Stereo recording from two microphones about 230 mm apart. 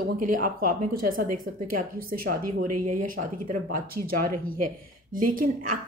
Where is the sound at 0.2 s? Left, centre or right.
Right.